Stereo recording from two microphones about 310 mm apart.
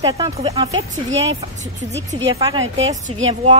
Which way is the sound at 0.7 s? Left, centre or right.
Right.